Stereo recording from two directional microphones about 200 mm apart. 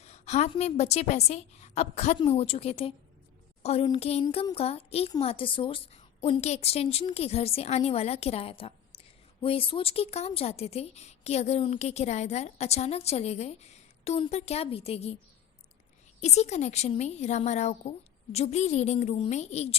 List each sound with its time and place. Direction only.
0.0 s a woman's voice: 35° left (ahead or behind)
16.2 s a woman's voice: 35° left (ahead or behind)